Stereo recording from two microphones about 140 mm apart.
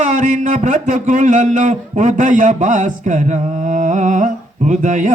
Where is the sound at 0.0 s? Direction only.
60° right (ahead or behind).